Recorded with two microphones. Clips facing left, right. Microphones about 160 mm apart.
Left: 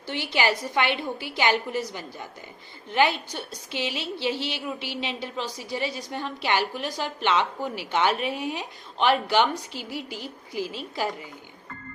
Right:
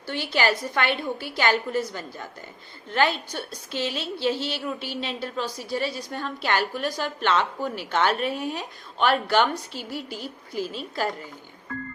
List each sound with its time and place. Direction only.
0.1 s a woman's voice: 15° left (ahead or behind)